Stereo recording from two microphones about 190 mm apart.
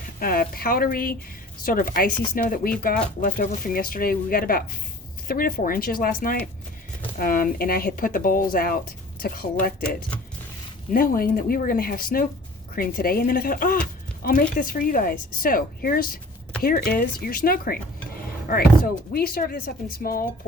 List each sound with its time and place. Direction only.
0.2 s speech: 50° left (ahead or behind)
10.9 s speech: 50° left (ahead or behind)